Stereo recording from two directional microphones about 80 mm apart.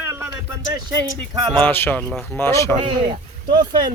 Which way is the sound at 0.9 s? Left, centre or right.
Right.